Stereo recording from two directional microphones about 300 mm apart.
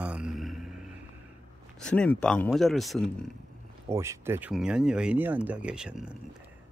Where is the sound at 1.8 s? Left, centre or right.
Centre.